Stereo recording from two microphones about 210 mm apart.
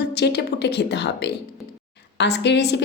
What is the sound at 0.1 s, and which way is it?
A woman's voice, 50° left (ahead or behind).